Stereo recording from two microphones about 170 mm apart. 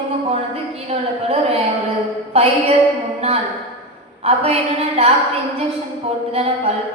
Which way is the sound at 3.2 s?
35° right (ahead or behind).